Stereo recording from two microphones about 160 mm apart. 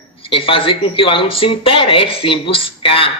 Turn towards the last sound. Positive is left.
turn(degrees=35)  # may be behind; listen again after turning